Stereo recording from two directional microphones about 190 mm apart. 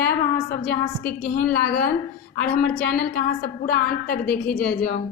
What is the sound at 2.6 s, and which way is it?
A woman's voice, 50° left (ahead or behind).